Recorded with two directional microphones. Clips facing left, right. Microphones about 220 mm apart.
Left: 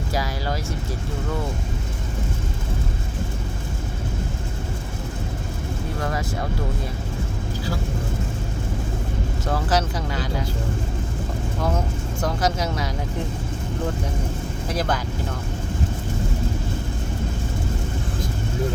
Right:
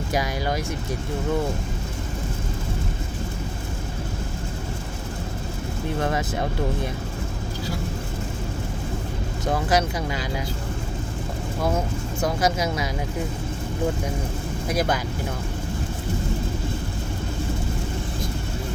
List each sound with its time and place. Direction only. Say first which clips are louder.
0.1 s a sound: right 2 dB; 15° right (ahead or behind)
6.0 s speech: right 3 dB; 20° right (ahead or behind)
9.5 s speech: right 1 dB; 10° right (ahead or behind)
12.2 s speech: right 1 dB; 10° right (ahead or behind)
14.7 s speech: right 2 dB; 10° right (ahead or behind)